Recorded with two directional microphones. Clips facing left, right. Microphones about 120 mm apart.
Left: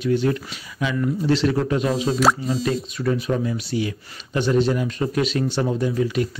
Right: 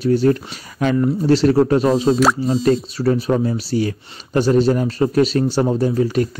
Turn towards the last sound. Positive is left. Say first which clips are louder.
# right 4 dB
turn(degrees=-40)  # may be behind; listen again after turning